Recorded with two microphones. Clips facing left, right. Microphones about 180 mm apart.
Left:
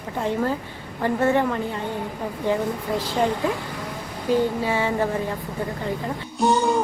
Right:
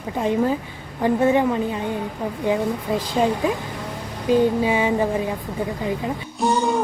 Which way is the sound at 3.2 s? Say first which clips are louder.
Right 3 dB; 20° right (ahead or behind).